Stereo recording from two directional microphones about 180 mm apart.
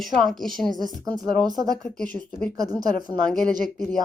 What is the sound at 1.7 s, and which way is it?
Speech, 5° left (ahead or behind).